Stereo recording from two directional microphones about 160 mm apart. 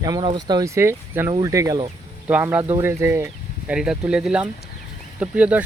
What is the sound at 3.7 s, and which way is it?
Speech, 5° right (ahead or behind).